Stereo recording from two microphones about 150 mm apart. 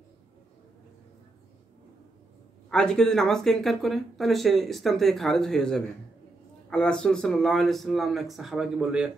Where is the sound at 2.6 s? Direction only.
5° left (ahead or behind).